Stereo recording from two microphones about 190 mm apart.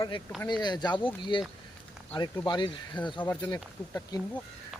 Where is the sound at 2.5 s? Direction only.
25° left (ahead or behind).